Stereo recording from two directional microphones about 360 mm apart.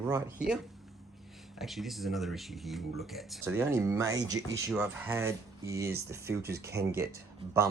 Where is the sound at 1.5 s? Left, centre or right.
Centre.